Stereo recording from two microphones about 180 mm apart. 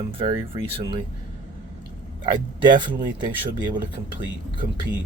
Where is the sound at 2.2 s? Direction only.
25° right (ahead or behind).